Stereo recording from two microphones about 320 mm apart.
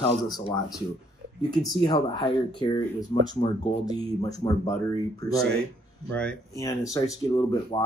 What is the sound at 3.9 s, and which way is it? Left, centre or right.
Speech, centre.